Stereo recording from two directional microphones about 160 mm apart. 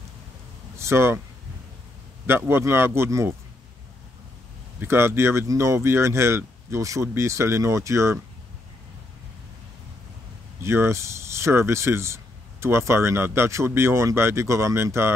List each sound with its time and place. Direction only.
0.7 s speech: 15° right (ahead or behind)
2.2 s speech: 15° right (ahead or behind)
4.7 s speech: 15° right (ahead or behind)
10.6 s speech: 15° right (ahead or behind)